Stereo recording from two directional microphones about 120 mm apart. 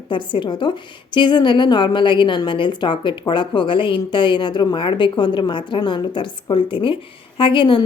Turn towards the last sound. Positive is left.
turn(degrees=45)  # may be behind; listen again after turning